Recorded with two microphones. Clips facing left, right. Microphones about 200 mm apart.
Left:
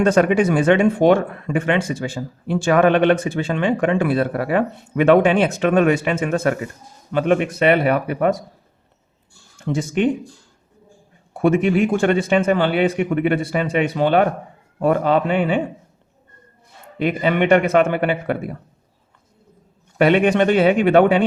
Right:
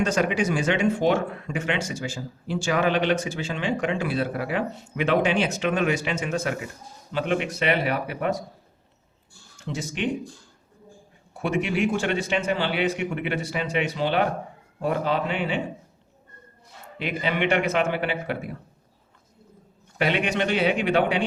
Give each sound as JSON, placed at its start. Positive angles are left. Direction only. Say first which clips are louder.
{"t": 0.0, "sound": "a man's voice", "louder": "left 8 dB", "side_deg": 55}
{"t": 9.6, "sound": "speech", "louder": "left 10 dB", "side_deg": 55}
{"t": 11.3, "sound": "a man's voice", "louder": "left 8 dB", "side_deg": 50}
{"t": 17.0, "sound": "a man's voice", "louder": "left 7 dB", "side_deg": 50}
{"t": 20.0, "sound": "a man's voice", "louder": "left 9 dB", "side_deg": 55}